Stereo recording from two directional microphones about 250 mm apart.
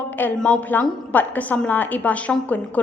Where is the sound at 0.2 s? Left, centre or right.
Centre.